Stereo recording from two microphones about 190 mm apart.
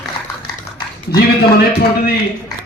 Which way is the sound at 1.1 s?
55° left (ahead or behind).